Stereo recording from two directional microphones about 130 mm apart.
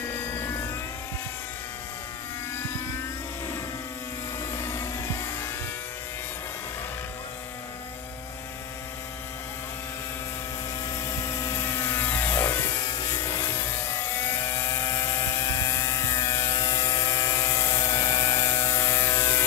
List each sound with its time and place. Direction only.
0.0 s vehicle: 15° left (ahead or behind)
4.4 s a sound: 25° left (ahead or behind)
10.9 s aircraft: 25° left (ahead or behind)
13.2 s vehicle: 20° left (ahead or behind)